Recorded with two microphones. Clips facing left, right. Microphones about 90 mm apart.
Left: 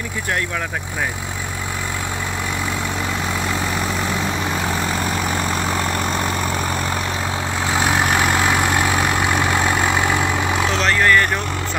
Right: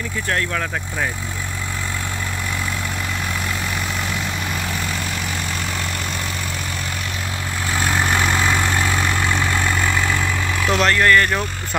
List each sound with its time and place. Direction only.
7.7 s vehicle: 15° left (ahead or behind)
10.7 s vehicle: 5° right (ahead or behind)
11.0 s speech: 10° left (ahead or behind)